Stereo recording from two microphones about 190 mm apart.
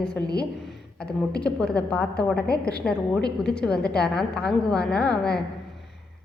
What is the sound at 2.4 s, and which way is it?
Speech, 55° left (ahead or behind).